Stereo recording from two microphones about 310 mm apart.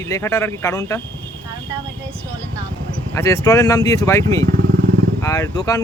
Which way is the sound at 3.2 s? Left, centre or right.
Centre.